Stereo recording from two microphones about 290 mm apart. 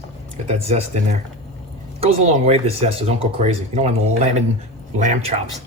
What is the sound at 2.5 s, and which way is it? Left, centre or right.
Speech, centre.